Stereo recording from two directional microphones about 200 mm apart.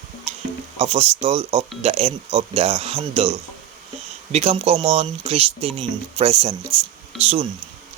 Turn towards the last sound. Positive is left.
turn(degrees=-30)  # may be behind; listen again after turning